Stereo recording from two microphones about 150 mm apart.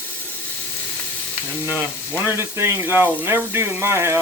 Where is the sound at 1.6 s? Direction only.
15° right (ahead or behind).